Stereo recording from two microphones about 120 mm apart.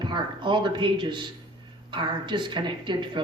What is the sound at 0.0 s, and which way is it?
A woman's voice, 40° right (ahead or behind).